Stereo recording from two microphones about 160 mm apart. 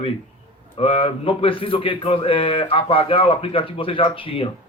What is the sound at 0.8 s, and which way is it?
Speech, 35° left (ahead or behind).